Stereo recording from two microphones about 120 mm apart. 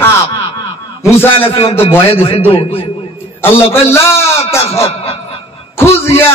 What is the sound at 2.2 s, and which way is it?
Speech, 50° left (ahead or behind).